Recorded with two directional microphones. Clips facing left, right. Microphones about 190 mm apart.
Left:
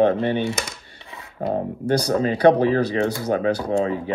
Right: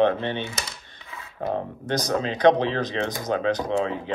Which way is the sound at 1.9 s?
35° left (ahead or behind).